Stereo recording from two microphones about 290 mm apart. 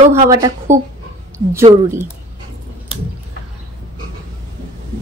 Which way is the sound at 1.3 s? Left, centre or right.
Centre.